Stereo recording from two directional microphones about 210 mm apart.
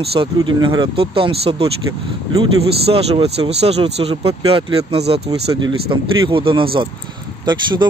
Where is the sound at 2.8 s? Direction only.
30° right (ahead or behind).